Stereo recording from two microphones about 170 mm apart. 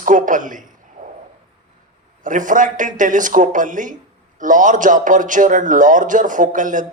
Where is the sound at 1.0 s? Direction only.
50° right (ahead or behind).